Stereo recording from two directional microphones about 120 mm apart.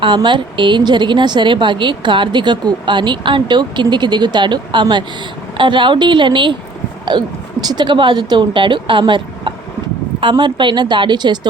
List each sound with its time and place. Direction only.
0.0 s a woman's voice: 40° right (ahead or behind)
7.0 s a sound: 35° right (ahead or behind)
7.7 s a woman's voice: 40° right (ahead or behind)